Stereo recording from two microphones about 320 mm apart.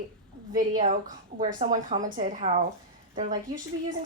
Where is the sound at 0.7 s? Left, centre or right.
Right.